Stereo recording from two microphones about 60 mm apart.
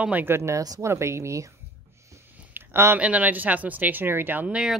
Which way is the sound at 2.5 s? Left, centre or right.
Right.